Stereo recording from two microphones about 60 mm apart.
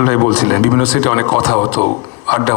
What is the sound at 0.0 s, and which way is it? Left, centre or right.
Speech, left.